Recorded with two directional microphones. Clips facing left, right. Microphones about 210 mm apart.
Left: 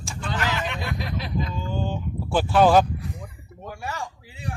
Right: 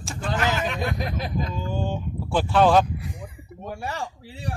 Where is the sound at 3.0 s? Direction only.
15° right (ahead or behind).